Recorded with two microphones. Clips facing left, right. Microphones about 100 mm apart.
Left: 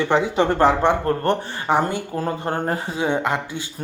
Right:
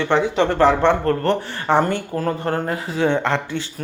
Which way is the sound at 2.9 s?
10° left (ahead or behind).